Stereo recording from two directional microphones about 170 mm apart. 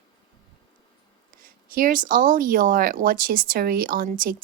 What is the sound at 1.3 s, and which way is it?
A woman's voice, 50° right (ahead or behind).